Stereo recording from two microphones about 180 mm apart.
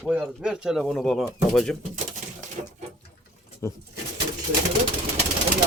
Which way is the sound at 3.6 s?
15° left (ahead or behind).